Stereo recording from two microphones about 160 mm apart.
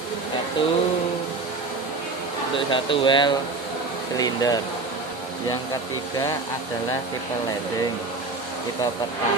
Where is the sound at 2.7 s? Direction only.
30° left (ahead or behind).